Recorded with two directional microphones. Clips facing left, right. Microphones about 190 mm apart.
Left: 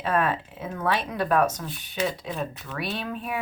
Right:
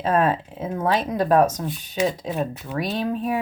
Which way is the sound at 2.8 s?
35° right (ahead or behind).